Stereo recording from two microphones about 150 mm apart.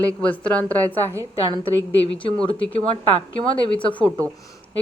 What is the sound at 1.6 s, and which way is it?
Speech, 35° left (ahead or behind).